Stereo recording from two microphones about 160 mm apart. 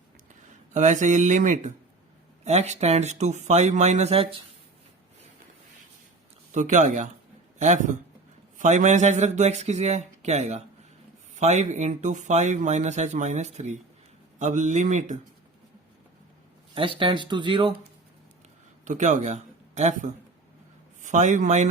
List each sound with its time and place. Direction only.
0.7 s speech: 50° right (ahead or behind)
6.5 s speech: 50° right (ahead or behind)
16.7 s speech: 35° right (ahead or behind)
18.9 s a man's voice: 50° right (ahead or behind)